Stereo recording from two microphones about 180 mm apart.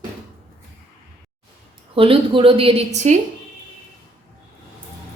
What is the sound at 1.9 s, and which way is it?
A woman's voice, 30° right (ahead or behind).